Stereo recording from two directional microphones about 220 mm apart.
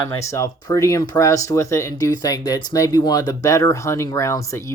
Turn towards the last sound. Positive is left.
turn(degrees=15)  # may be behind; listen again after turning